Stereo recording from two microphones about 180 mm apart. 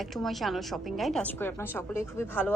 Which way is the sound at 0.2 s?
Centre (ahead or behind).